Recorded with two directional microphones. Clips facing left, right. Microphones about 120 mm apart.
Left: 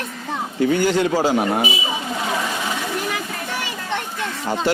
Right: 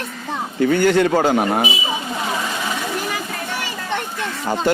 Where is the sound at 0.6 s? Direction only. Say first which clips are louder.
Right 3 dB; 55° right (ahead or behind).